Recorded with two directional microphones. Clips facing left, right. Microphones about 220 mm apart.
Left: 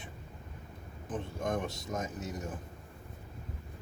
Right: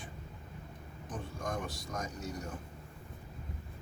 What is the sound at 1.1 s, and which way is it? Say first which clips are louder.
A man's voice: left 5 dB; 20° left (ahead or behind).